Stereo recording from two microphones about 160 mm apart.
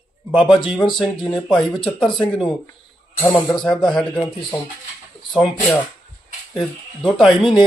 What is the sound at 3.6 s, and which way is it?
Speech, 5° left (ahead or behind).